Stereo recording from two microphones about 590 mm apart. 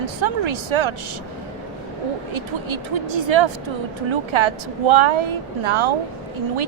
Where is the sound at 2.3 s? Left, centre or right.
Right.